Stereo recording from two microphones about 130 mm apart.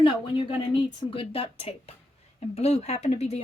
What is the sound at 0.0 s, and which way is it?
Speech, 40° left (ahead or behind).